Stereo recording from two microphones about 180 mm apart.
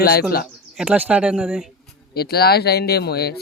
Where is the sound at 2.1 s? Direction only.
60° left (ahead or behind).